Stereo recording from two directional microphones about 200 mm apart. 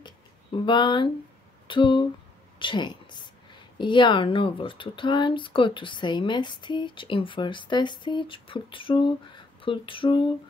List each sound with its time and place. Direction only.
0.7 s a woman's voice: 25° left (ahead or behind)